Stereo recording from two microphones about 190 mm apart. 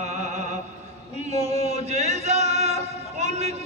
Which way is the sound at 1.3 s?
35° right (ahead or behind).